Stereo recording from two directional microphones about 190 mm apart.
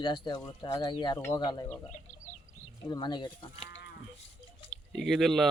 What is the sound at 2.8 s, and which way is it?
Speech, 20° left (ahead or behind).